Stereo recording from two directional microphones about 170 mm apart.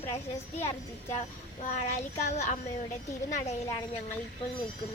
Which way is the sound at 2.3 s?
45° left (ahead or behind).